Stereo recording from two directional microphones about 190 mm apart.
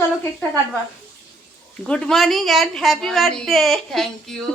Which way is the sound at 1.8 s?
Centre (ahead or behind).